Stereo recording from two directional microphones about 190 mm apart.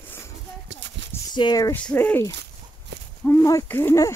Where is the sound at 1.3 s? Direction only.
20° left (ahead or behind).